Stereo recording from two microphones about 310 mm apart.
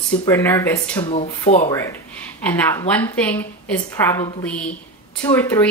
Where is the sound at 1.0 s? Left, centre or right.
Centre.